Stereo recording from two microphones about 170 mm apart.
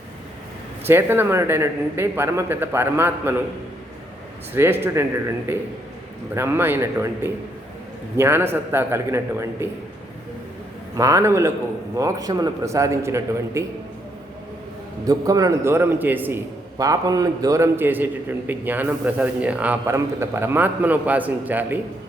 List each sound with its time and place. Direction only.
0.9 s a man's voice: 15° right (ahead or behind)
4.5 s a man's voice: 15° right (ahead or behind)
10.9 s a man's voice: 20° right (ahead or behind)
15.0 s a man's voice: 20° right (ahead or behind)